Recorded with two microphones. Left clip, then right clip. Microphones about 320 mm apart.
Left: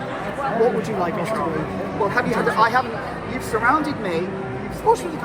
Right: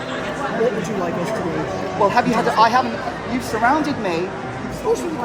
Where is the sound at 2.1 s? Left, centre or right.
Centre.